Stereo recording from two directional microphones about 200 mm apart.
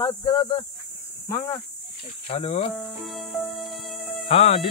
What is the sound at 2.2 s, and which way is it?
Speech, 30° left (ahead or behind).